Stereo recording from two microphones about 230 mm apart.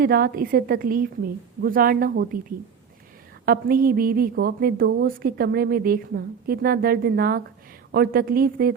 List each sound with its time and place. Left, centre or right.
0.0 s a woman's voice: right
3.4 s a woman's voice: right